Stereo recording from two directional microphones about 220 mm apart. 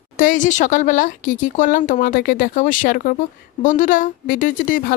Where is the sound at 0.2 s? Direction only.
35° left (ahead or behind).